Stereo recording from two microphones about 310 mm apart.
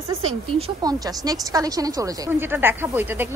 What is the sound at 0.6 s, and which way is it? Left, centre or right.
Speech, centre.